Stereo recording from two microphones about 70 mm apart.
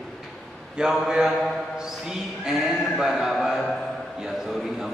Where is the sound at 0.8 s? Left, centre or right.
Centre.